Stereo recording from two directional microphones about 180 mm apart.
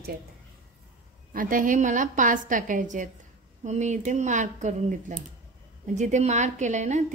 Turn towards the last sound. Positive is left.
turn(degrees=-40)  # may be behind; listen again after turning